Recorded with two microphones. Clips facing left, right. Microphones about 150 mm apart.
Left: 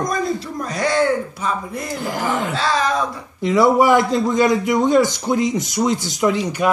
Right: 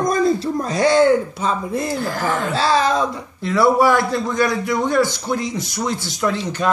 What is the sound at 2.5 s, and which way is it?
Speech, 30° right (ahead or behind).